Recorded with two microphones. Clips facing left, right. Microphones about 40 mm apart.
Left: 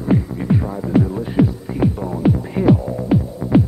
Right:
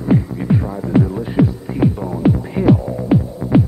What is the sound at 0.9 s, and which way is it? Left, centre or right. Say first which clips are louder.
Music: right 1 dB; centre.